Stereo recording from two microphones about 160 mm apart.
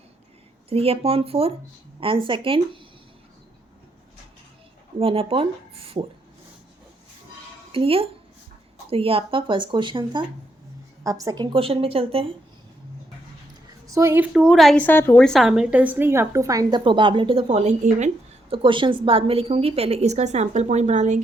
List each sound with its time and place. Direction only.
0.7 s a woman's voice: 35° right (ahead or behind)
4.9 s a woman's voice: 35° right (ahead or behind)
7.7 s a woman's voice: 35° right (ahead or behind)
11.5 s a woman's voice: 35° right (ahead or behind)
13.9 s a woman's voice: 15° right (ahead or behind); by 14.8 s centre (ahead or behind)
14.8 s a woman's voice: 10° left (ahead or behind); by 18.1 s 45° right (ahead or behind)
18.5 s a woman's voice: 30° right (ahead or behind); by 21.2 s 45° right (ahead or behind)